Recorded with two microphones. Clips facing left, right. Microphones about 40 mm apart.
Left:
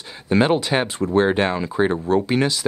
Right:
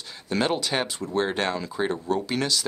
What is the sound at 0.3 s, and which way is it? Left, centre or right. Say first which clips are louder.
Speech: left 7 dB; left.